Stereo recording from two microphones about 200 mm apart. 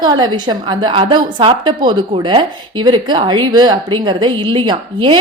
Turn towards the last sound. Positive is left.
turn(degrees=-25)  # may be behind; listen again after turning